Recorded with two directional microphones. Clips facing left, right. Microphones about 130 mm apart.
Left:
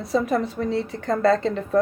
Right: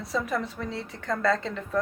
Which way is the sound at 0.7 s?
60° left (ahead or behind).